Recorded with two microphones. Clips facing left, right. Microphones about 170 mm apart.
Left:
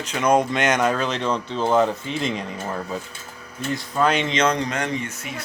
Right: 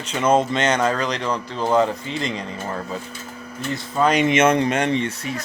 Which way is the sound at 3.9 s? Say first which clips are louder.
Right 2 dB; centre (ahead or behind).